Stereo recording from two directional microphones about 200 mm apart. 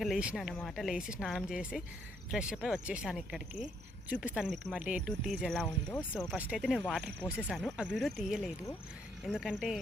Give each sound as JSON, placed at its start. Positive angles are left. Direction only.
{"t": 0.0, "sound": "speech", "side_deg": -5}
{"t": 6.3, "sound": "speech", "side_deg": -5}